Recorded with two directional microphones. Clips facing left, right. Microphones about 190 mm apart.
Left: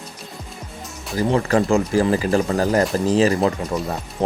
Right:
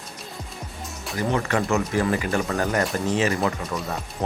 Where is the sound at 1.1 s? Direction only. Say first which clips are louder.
Left 6 dB; 35° left (ahead or behind).